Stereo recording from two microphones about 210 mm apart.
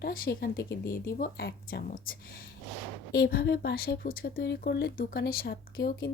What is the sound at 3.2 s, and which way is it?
Speech, 50° left (ahead or behind).